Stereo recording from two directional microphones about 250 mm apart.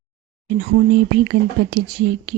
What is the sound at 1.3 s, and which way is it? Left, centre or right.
Speech, right.